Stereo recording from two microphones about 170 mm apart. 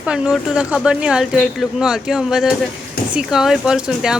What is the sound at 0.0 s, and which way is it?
Speech, 5° right (ahead or behind).